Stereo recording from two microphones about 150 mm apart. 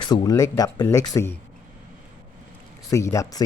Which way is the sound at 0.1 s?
25° left (ahead or behind).